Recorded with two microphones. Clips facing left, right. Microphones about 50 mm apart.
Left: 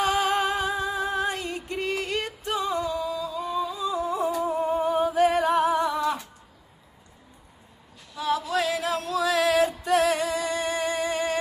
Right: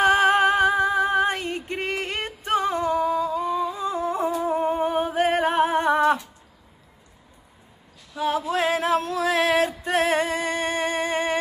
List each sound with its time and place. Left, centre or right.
0.0 s music: right
8.2 s music: right